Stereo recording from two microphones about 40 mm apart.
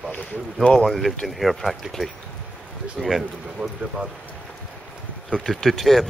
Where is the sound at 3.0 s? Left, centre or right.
Centre.